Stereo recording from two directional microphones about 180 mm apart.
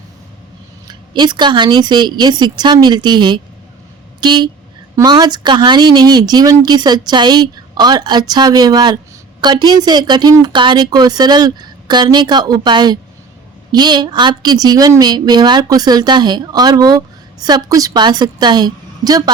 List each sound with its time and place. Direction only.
0.9 s speech: 25° right (ahead or behind)